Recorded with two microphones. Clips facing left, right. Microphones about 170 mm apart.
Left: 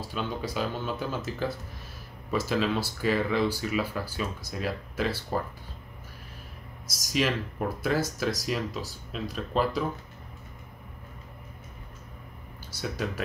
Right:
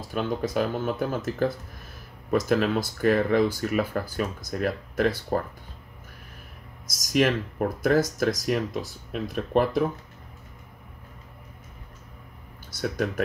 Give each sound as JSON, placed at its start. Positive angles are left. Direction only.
{"t": 0.1, "sound": "speech", "side_deg": -50}
{"t": 7.1, "sound": "speech", "side_deg": -50}
{"t": 12.9, "sound": "speech", "side_deg": -50}